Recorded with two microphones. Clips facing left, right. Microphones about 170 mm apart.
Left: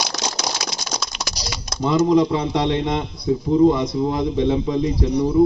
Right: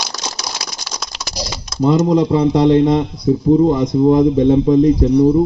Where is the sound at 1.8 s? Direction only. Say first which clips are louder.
Right 3 dB; 40° right (ahead or behind).